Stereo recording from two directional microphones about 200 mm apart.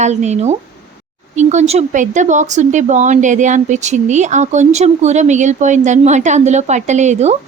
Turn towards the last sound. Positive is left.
turn(degrees=-35)  # may be behind; listen again after turning